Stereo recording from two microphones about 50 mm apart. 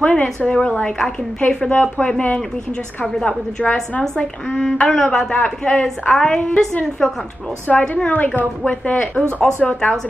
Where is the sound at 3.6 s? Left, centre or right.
Centre.